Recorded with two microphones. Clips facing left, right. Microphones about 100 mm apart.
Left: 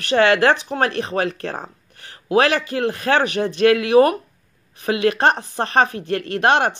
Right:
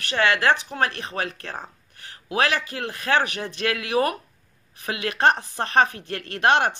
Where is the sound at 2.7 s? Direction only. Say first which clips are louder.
Left 6 dB; 30° left (ahead or behind).